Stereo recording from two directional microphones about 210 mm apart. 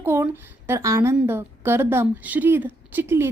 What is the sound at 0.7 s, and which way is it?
A woman's voice, 15° right (ahead or behind).